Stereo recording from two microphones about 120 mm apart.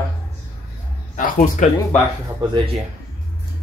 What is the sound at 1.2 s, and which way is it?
Speech, 90° left.